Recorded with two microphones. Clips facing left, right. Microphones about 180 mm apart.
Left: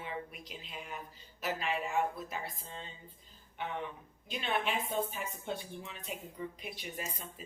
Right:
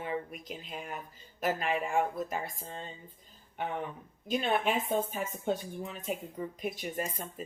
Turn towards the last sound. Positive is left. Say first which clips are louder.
# right 7 dB
turn(degrees=-50)  # may be behind; listen again after turning